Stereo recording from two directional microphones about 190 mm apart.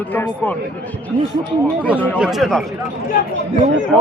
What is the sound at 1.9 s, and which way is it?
Speech, 10° left (ahead or behind).